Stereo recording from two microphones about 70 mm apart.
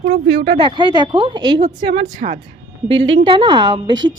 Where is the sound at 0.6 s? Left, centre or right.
Right.